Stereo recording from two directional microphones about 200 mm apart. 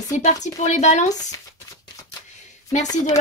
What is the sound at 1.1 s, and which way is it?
Speech, 20° left (ahead or behind).